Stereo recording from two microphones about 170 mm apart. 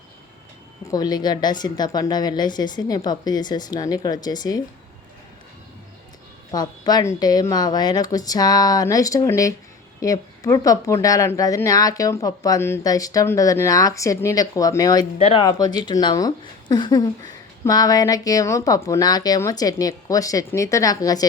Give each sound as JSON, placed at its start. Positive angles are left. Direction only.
{"t": 0.9, "sound": "speech", "side_deg": 25}
{"t": 6.5, "sound": "speech", "side_deg": 25}
{"t": 15.2, "sound": "speech", "side_deg": 35}
{"t": 15.4, "sound": "speech", "side_deg": 20}